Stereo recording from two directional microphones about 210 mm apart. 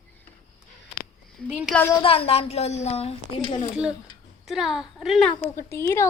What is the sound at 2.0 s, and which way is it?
A woman's voice, 25° left (ahead or behind).